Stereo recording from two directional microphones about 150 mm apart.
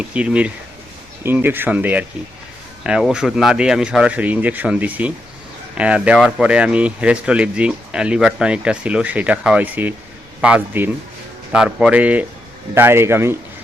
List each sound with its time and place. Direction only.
0.0 s speech: 10° right (ahead or behind)